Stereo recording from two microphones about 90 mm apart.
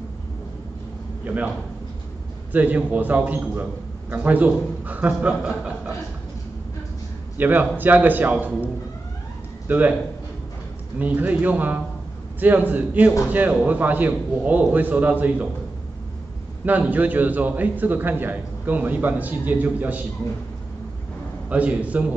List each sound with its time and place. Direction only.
1.2 s a man's voice: 15° right (ahead or behind)
2.5 s a man's voice: 20° right (ahead or behind)
7.3 s a man's voice: 20° right (ahead or behind)
9.7 s a man's voice: 20° right (ahead or behind)
11.0 s a man's voice: 20° right (ahead or behind)
16.6 s a man's voice: 20° right (ahead or behind)
21.5 s a man's voice: 15° right (ahead or behind)